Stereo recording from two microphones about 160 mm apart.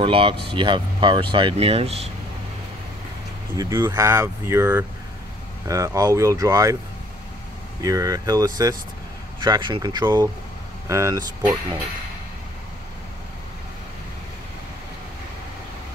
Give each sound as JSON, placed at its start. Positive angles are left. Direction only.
{"t": 0.0, "sound": "speech", "side_deg": -35}
{"t": 3.5, "sound": "speech", "side_deg": -20}
{"t": 7.8, "sound": "speech", "side_deg": -20}